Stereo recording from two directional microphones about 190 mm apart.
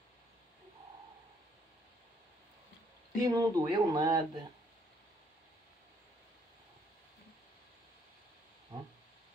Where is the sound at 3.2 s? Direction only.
20° right (ahead or behind).